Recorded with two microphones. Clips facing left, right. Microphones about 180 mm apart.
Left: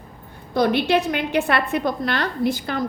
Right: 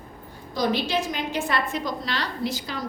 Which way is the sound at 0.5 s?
60° left (ahead or behind).